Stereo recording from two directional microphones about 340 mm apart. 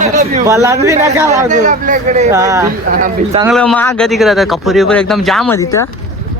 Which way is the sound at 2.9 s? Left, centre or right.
Right.